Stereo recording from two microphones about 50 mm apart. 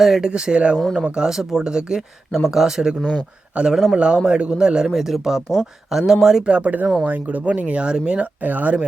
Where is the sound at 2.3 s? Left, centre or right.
Centre.